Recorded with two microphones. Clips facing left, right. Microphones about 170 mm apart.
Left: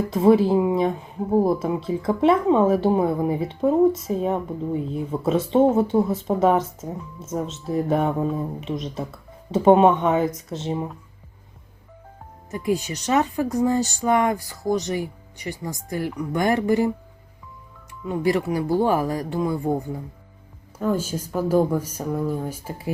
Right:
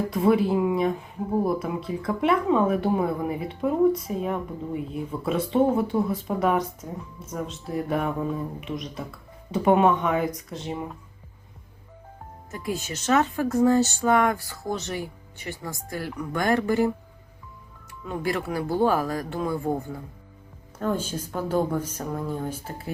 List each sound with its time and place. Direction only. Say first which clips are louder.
0.1 s speech: left 6 dB; 25° left (ahead or behind)
12.5 s speech: left 7 dB; 20° left (ahead or behind)
18.1 s speech: left 6 dB; 15° left (ahead or behind)
20.7 s speech: left 3 dB; 10° left (ahead or behind)